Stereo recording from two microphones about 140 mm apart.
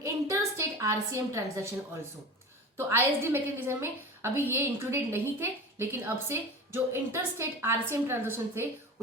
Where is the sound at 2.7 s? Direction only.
15° right (ahead or behind).